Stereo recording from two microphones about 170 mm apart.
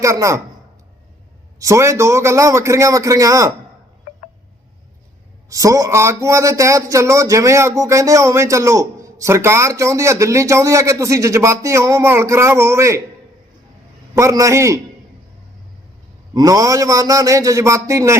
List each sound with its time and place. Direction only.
0.0 s a man's voice: 20° right (ahead or behind)
1.5 s speech: 20° right (ahead or behind)
5.5 s speech: 20° right (ahead or behind)
14.2 s speech: 20° right (ahead or behind)
16.3 s a man's voice: 20° right (ahead or behind)